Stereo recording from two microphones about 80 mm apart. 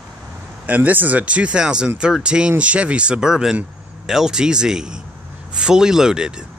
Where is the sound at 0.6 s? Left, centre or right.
Centre.